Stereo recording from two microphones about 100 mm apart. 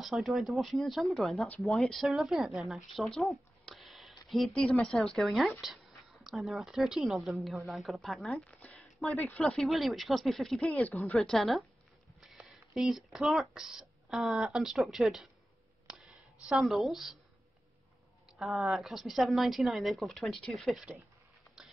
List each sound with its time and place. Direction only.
0.0 s a woman's voice: centre (ahead or behind)
8.5 s a sound: 15° left (ahead or behind)
9.1 s speech: 20° left (ahead or behind)
9.4 s a woman's voice: centre (ahead or behind)
10.7 s speech: 15° left (ahead or behind)
11.1 s a woman's voice: centre (ahead or behind)
12.2 s a sound: centre (ahead or behind)
13.5 s a woman's voice: 10° right (ahead or behind)
18.4 s a woman's voice: centre (ahead or behind)